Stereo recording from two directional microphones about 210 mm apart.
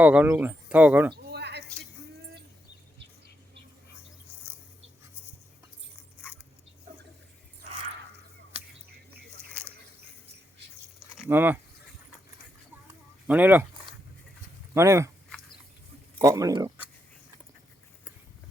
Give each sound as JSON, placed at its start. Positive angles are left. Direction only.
{"t": 0.0, "sound": "speech", "side_deg": -5}
{"t": 1.1, "sound": "a sound", "side_deg": -50}
{"t": 11.2, "sound": "speech", "side_deg": -10}
{"t": 13.2, "sound": "speech", "side_deg": -10}
{"t": 14.7, "sound": "speech", "side_deg": -15}
{"t": 16.1, "sound": "speech", "side_deg": -15}